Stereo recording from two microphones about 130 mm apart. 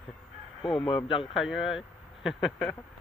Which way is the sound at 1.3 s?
5° right (ahead or behind).